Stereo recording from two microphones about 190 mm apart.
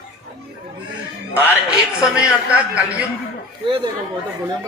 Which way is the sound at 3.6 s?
25° right (ahead or behind).